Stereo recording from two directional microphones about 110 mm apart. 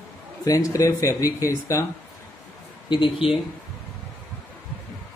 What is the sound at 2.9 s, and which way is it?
Speech, 55° left (ahead or behind).